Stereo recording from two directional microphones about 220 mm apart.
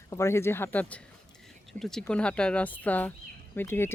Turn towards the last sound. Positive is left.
turn(degrees=10)  # may be behind; listen again after turning